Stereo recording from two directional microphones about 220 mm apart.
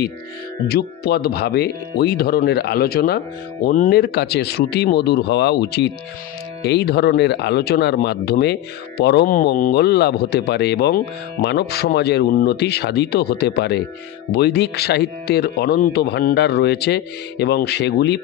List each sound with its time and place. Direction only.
0.7 s speech: 45° left (ahead or behind)